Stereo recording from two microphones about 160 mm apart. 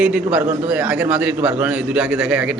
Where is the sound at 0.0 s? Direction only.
5° right (ahead or behind).